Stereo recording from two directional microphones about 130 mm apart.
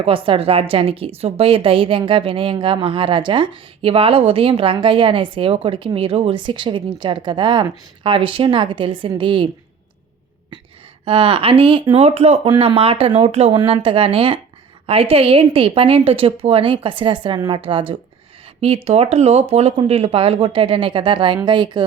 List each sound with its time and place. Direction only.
0.0 s a woman's voice: 45° right (ahead or behind)
11.0 s a woman's voice: 45° right (ahead or behind)
18.9 s a woman's voice: 50° right (ahead or behind); by 21.8 s 35° right (ahead or behind)